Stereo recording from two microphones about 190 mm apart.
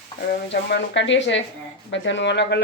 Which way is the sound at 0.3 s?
65° left (ahead or behind).